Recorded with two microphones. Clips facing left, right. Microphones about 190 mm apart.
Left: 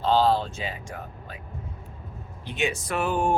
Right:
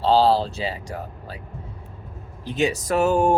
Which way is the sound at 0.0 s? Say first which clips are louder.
Right 4 dB; 35° right (ahead or behind).